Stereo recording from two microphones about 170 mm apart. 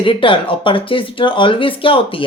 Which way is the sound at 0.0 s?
30° left (ahead or behind).